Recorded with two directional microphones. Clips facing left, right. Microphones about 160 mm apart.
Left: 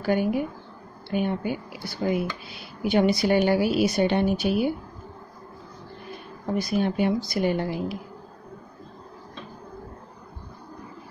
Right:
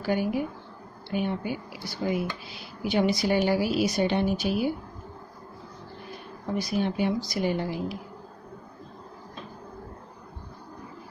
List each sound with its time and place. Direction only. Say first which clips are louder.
0.0 s speech: left 3 dB; 55° left (ahead or behind)
6.6 s speech: left 3 dB; 55° left (ahead or behind)